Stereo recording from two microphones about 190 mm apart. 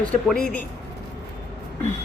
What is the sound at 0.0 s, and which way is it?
Speech, 5° left (ahead or behind).